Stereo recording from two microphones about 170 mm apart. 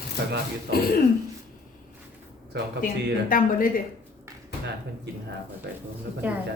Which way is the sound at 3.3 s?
55° left (ahead or behind).